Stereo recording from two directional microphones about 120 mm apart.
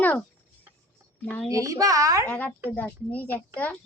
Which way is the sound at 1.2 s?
15° left (ahead or behind).